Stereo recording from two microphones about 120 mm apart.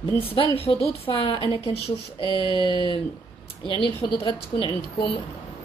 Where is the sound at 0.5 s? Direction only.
55° left (ahead or behind).